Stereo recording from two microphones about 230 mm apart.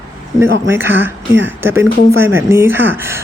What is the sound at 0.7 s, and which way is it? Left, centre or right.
Speech, centre.